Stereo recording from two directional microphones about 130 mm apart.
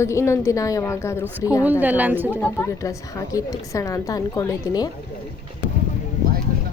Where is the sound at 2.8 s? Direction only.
25° left (ahead or behind).